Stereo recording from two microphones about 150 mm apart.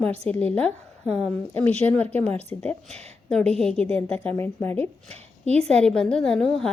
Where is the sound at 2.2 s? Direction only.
45° right (ahead or behind).